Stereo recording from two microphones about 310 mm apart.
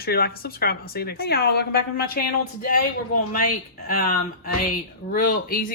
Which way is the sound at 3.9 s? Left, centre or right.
Left.